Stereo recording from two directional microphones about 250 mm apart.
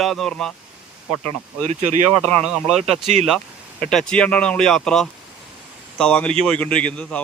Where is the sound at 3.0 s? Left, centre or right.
Right.